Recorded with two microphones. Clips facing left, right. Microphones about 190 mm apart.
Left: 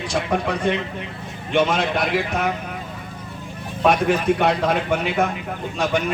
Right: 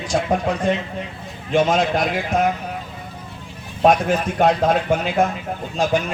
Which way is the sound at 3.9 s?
65° left (ahead or behind).